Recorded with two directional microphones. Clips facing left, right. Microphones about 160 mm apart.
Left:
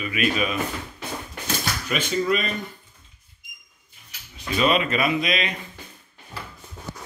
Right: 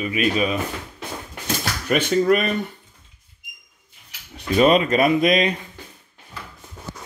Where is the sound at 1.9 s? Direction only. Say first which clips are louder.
Right 6 dB; 55° right (ahead or behind).